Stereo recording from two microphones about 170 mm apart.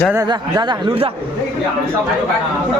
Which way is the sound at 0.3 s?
25° right (ahead or behind).